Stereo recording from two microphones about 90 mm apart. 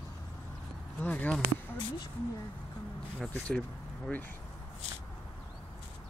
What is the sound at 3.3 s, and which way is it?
Speech, 15° left (ahead or behind).